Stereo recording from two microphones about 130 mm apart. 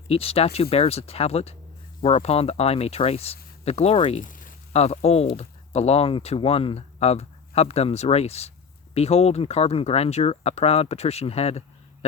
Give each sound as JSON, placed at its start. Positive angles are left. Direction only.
{"t": 0.1, "sound": "speech", "side_deg": 50}
{"t": 4.2, "sound": "a sound", "side_deg": 90}
{"t": 4.7, "sound": "speech", "side_deg": 55}